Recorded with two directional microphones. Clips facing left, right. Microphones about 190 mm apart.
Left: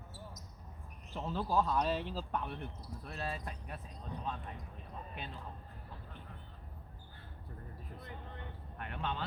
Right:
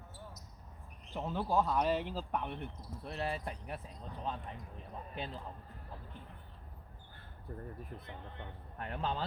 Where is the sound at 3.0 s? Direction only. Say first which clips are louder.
Right 4 dB; 25° right (ahead or behind).